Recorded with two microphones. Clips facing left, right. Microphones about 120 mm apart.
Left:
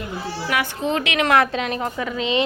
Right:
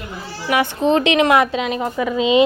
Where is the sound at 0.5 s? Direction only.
25° right (ahead or behind).